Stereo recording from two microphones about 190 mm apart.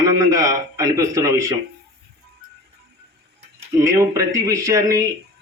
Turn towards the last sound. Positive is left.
turn(degrees=-15)  # may be behind; listen again after turning